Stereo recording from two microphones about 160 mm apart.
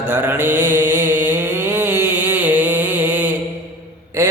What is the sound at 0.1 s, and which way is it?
Mantra, 15° right (ahead or behind).